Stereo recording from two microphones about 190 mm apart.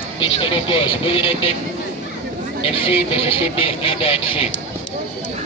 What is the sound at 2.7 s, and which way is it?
Speech, 30° left (ahead or behind).